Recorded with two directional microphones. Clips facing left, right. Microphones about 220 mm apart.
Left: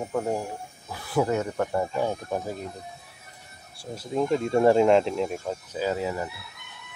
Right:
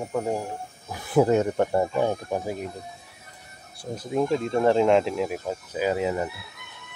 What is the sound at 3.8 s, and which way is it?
Speech, 20° right (ahead or behind).